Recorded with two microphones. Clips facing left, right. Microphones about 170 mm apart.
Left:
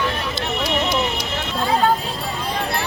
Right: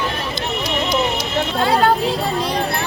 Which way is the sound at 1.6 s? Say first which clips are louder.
Right 2 dB; 75° right (ahead or behind).